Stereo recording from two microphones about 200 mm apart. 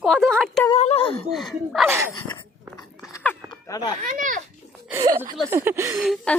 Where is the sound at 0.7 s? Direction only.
30° left (ahead or behind).